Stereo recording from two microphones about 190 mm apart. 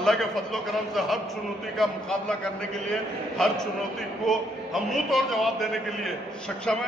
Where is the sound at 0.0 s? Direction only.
Centre (ahead or behind).